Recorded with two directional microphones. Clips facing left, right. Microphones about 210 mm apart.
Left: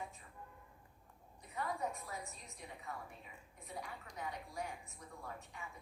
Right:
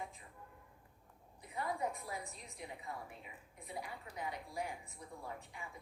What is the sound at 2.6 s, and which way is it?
A woman's voice, 15° right (ahead or behind).